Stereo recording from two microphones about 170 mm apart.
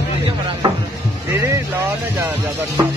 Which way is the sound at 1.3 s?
15° right (ahead or behind).